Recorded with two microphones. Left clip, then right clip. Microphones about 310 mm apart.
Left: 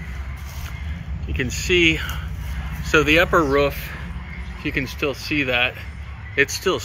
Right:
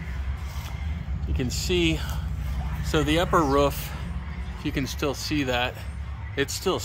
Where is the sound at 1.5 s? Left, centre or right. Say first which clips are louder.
Left 8 dB; centre.